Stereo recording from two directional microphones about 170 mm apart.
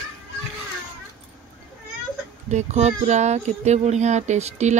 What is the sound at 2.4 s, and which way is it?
A woman's voice, 40° right (ahead or behind).